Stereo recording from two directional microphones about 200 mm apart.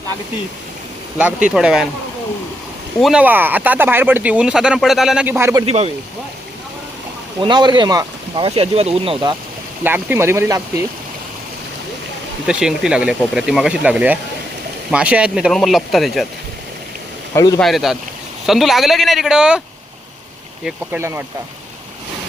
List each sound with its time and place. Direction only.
1.2 s speech: 5° right (ahead or behind)
3.0 s speech: 5° right (ahead or behind)
5.6 s speech: 30° right (ahead or behind)
7.4 s speech: 20° right (ahead or behind)
9.8 s speech: 10° right (ahead or behind)
12.5 s speech: 5° right (ahead or behind)
17.3 s a man's voice: 15° left (ahead or behind)
17.6 s speech: centre (ahead or behind)
20.7 s speech: 10° right (ahead or behind)